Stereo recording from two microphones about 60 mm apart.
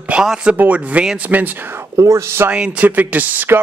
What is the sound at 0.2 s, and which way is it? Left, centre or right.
Speech, centre.